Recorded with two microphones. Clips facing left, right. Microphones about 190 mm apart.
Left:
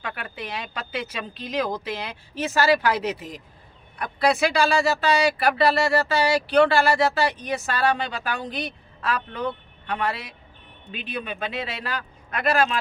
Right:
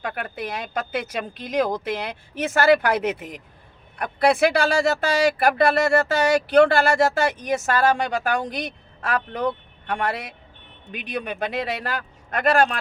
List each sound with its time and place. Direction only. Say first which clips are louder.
0.0 s speech: right 4 dB; 45° right (ahead or behind)